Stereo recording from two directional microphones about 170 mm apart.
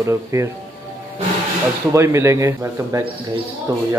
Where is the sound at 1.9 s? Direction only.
15° right (ahead or behind).